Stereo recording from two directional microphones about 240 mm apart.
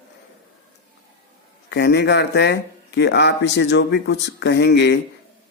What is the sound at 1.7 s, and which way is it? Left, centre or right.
Speech, left.